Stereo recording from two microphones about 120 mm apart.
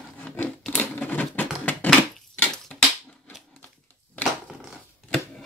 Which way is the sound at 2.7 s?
5° left (ahead or behind).